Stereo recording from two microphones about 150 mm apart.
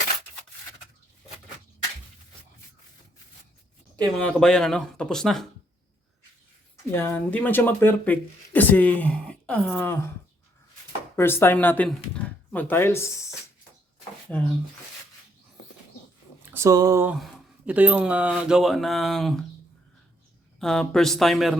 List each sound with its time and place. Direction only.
4.0 s speech: 5° left (ahead or behind)
6.9 s speech: 15° left (ahead or behind)
11.2 s speech: 15° left (ahead or behind)
14.3 s speech: 10° left (ahead or behind)
16.5 s speech: 20° right (ahead or behind)
17.1 s speech: 5° right (ahead or behind)
20.6 s speech: 5° left (ahead or behind)